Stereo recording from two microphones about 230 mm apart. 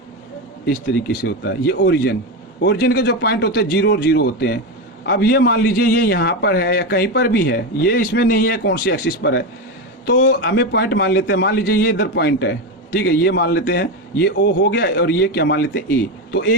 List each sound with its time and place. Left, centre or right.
1.2 s a man's voice: left